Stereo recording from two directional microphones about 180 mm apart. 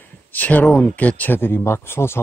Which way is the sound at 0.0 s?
10° left (ahead or behind).